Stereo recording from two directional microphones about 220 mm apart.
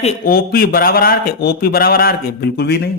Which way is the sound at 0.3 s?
45° left (ahead or behind).